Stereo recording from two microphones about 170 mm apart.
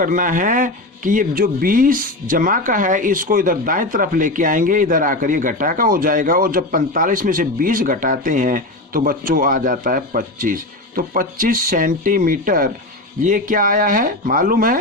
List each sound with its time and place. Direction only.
0.0 s speech: 50° right (ahead or behind)